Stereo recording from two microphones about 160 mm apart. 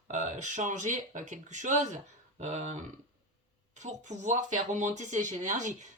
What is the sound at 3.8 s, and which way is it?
Speech, 45° right (ahead or behind).